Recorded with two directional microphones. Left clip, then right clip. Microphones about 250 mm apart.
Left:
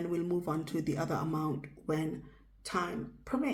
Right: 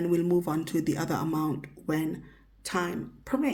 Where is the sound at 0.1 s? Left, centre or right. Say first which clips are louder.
Right 8 dB; right.